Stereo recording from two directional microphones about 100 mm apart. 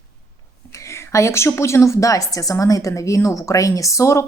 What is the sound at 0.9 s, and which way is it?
Speech, 30° left (ahead or behind).